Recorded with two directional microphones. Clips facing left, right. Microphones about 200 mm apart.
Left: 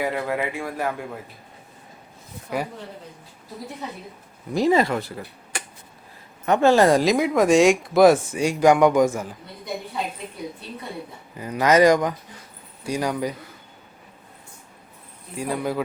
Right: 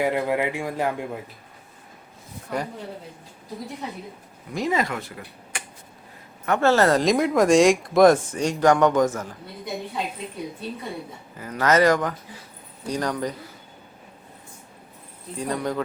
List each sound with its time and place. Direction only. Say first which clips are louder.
0.0 s speech: right 2 dB; 15° right (ahead or behind)
2.5 s speech: left 1 dB; 5° left (ahead or behind)
4.5 s speech: left 6 dB; 30° left (ahead or behind)
6.4 s speech: left 3 dB; 15° left (ahead or behind)
7.0 s speech: even; centre (ahead or behind)
11.3 s speech: left 3 dB; 15° left (ahead or behind)
15.4 s speech: left 1 dB; 5° left (ahead or behind)